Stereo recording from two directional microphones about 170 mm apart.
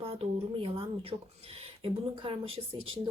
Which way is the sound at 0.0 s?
35° right (ahead or behind).